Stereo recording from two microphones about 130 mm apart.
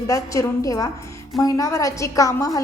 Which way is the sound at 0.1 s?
25° left (ahead or behind).